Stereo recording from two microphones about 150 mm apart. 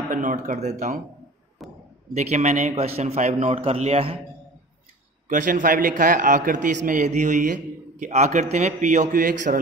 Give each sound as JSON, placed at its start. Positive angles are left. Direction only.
{"t": 0.1, "sound": "a man's voice", "side_deg": -60}
{"t": 1.6, "sound": "a sound", "side_deg": 0}
{"t": 2.1, "sound": "a man's voice", "side_deg": -50}
{"t": 5.3, "sound": "a man's voice", "side_deg": -60}